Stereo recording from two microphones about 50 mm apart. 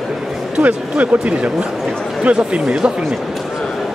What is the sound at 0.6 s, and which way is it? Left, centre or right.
Speech, right.